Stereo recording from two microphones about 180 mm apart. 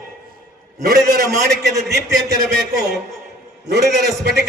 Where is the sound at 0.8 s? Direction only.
60° right (ahead or behind).